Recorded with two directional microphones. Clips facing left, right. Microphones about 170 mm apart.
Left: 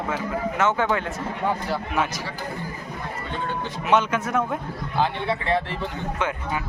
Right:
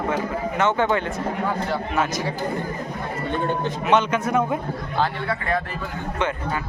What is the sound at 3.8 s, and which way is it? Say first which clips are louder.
Speech: right 1 dB; 5° left (ahead or behind).